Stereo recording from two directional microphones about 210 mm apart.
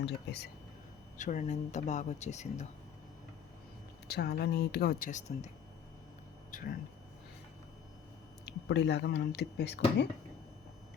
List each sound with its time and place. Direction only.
0.0 s speech: 55° left (ahead or behind)
1.2 s speech: 35° left (ahead or behind)
4.1 s speech: 50° left (ahead or behind)
6.5 s speech: 45° left (ahead or behind)
8.4 s speech: 55° left (ahead or behind)